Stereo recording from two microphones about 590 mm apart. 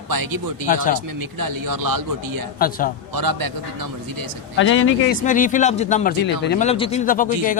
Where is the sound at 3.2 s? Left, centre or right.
Right.